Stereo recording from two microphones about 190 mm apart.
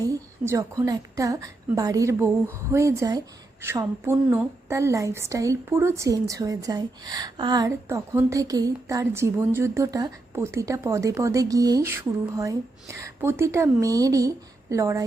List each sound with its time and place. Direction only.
0.0 s a woman's voice: 15° right (ahead or behind)